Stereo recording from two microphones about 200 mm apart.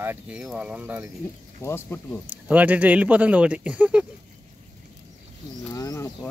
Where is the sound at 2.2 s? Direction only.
10° right (ahead or behind).